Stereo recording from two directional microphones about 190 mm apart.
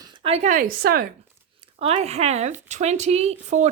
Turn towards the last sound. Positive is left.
turn(degrees=-35)  # may be behind; listen again after turning